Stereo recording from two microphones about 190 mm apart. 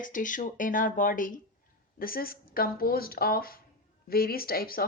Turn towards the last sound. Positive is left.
turn(degrees=50)  # may be behind; listen again after turning